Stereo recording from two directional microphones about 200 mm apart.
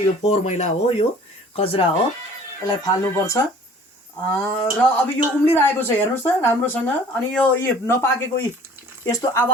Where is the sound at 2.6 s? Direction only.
15° left (ahead or behind).